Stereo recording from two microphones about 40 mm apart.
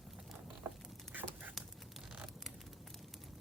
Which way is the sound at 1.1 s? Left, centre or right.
Right.